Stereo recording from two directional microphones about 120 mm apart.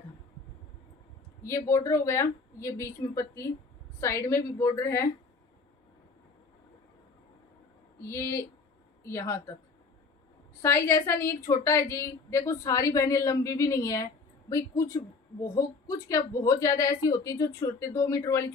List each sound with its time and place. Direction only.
1.4 s a woman's voice: 25° left (ahead or behind)
8.0 s a woman's voice: 25° left (ahead or behind)
10.6 s a woman's voice: 20° left (ahead or behind)